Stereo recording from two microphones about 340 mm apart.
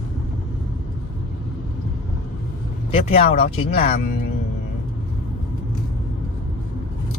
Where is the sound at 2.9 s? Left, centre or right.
Centre.